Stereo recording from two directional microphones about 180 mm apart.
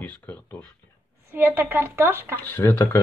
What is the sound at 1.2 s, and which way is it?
A woman's voice, 15° right (ahead or behind).